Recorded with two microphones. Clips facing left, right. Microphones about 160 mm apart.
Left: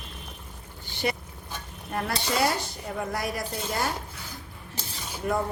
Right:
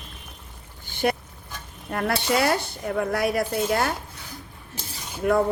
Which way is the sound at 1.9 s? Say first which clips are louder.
Right 4 dB; 60° right (ahead or behind).